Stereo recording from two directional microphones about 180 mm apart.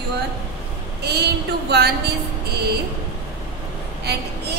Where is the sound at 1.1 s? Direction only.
65° right (ahead or behind).